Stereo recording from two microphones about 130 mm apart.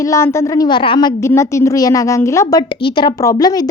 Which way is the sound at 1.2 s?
20° left (ahead or behind).